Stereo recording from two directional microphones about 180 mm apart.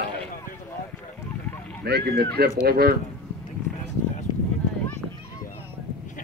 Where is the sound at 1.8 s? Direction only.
65° right (ahead or behind).